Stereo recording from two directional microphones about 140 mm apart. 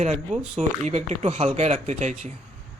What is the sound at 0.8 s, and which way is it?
Speech, 55° right (ahead or behind).